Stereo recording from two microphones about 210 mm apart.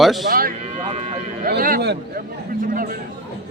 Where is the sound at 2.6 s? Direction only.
40° right (ahead or behind).